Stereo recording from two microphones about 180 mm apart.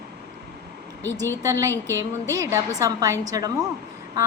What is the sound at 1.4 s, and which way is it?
A woman's voice, 15° right (ahead or behind).